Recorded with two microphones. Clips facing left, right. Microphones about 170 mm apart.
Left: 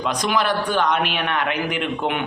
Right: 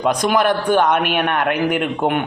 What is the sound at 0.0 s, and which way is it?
A man's voice, 50° right (ahead or behind).